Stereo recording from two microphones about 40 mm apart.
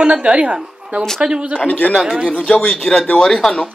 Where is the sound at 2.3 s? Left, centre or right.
Left.